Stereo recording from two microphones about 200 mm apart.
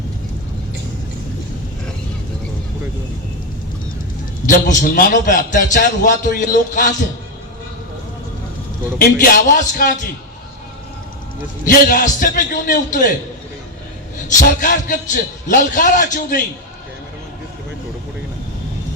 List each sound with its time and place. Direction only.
4.4 s a man's voice: 40° left (ahead or behind)
9.0 s a man's voice: 45° left (ahead or behind)
11.6 s a man's voice: 45° left (ahead or behind)
14.3 s a man's voice: 40° left (ahead or behind)